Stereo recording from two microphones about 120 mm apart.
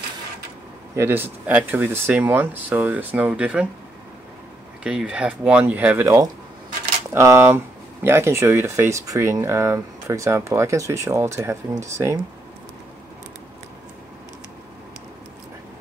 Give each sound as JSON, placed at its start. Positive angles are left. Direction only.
{"t": 0.9, "sound": "speech", "side_deg": -20}
{"t": 4.8, "sound": "speech", "side_deg": -10}
{"t": 7.1, "sound": "speech", "side_deg": -25}